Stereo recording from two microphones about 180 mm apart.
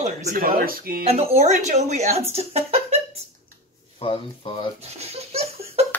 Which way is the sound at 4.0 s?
30° left (ahead or behind).